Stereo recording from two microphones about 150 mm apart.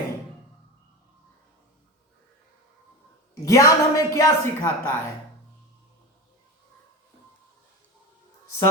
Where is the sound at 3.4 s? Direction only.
20° left (ahead or behind).